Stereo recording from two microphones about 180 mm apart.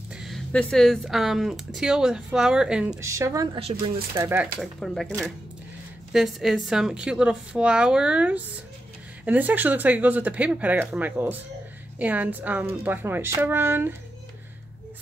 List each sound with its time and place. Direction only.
0.1 s speech: centre (ahead or behind)
3.0 s speech: 15° right (ahead or behind)
3.7 s speech: 35° right (ahead or behind)
4.1 s speech: 15° right (ahead or behind)
4.6 s speech: centre (ahead or behind)
6.1 s speech: centre (ahead or behind)